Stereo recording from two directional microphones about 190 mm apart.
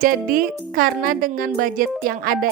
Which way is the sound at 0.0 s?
45° right (ahead or behind).